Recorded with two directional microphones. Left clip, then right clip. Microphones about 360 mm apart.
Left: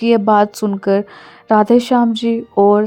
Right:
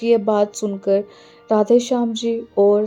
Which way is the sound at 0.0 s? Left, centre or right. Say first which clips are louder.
Left 4 dB; centre.